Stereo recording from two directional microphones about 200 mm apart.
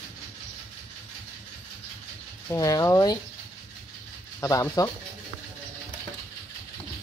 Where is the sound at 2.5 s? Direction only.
15° left (ahead or behind).